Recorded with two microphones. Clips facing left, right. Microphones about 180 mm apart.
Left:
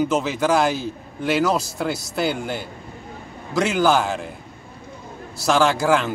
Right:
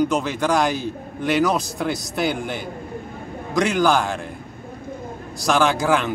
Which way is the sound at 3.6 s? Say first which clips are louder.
Even; centre (ahead or behind).